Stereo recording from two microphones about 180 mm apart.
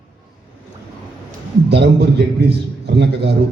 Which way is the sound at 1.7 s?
70° right (ahead or behind).